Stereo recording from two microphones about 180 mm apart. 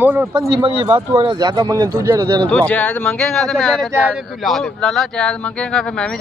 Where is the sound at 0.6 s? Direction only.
30° right (ahead or behind).